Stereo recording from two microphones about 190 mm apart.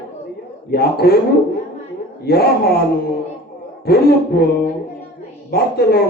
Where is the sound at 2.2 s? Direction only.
55° left (ahead or behind).